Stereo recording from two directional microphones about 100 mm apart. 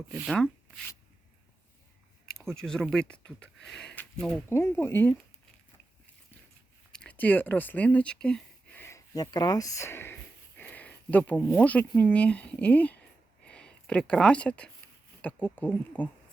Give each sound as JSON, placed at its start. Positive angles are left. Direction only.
{"t": 2.2, "sound": "speech", "side_deg": 5}
{"t": 4.4, "sound": "speech", "side_deg": 25}
{"t": 6.9, "sound": "speech", "side_deg": 10}
{"t": 9.1, "sound": "speech", "side_deg": 40}
{"t": 10.6, "sound": "speech", "side_deg": 15}